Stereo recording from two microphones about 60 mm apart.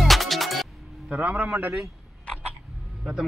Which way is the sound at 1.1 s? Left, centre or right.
Right.